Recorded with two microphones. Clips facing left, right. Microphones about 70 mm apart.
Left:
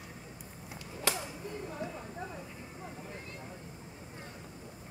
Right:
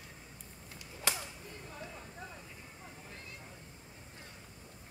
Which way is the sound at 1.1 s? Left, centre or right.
Centre.